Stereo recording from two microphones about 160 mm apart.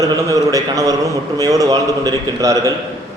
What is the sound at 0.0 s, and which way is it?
A man's voice, 20° right (ahead or behind).